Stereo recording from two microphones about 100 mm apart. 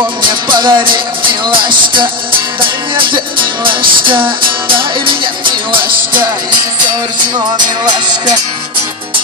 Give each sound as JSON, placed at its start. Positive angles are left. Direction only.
{"t": 0.2, "sound": "music", "side_deg": -50}
{"t": 7.3, "sound": "music", "side_deg": -45}